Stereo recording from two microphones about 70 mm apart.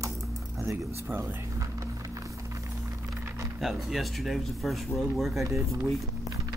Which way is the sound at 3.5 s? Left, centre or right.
Centre.